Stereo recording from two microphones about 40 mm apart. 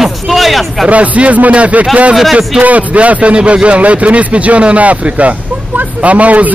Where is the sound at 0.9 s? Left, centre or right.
Right.